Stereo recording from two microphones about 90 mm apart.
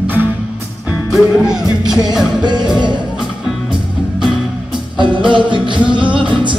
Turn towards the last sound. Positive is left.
turn(degrees=-65)  # may be behind; listen again after turning